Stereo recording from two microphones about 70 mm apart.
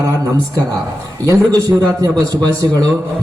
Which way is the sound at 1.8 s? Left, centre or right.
Right.